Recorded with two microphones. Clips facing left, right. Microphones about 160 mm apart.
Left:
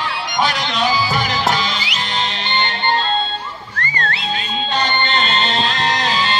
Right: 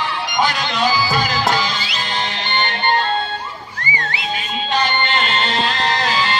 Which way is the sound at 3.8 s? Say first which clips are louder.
Left 2 dB; 65° left (ahead or behind).